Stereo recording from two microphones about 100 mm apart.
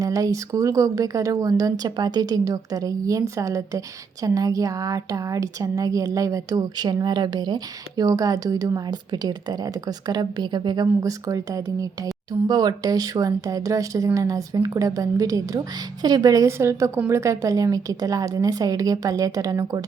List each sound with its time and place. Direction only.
0.0 s a woman's voice: 35° right (ahead or behind)